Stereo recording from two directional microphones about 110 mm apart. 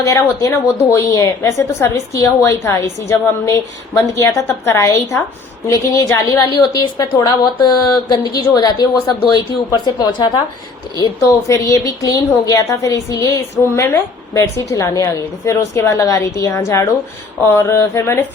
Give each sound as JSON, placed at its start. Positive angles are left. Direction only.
{"t": 0.0, "sound": "a woman's voice", "side_deg": 25}
{"t": 6.5, "sound": "a woman's voice", "side_deg": 40}